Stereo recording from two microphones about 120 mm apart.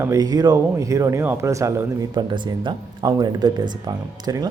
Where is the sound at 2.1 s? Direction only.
40° right (ahead or behind).